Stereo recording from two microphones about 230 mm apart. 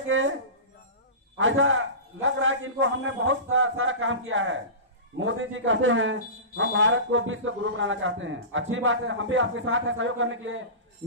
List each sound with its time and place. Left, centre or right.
0.1 s music: right
1.4 s a man's voice: right